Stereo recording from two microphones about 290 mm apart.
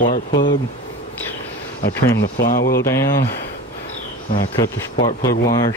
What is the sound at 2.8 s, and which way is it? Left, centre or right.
Speech, centre.